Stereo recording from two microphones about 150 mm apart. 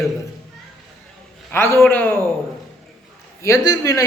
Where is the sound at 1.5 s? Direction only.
15° left (ahead or behind).